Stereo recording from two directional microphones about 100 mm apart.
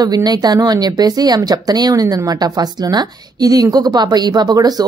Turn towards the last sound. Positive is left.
turn(degrees=-40)  # may be behind; listen again after turning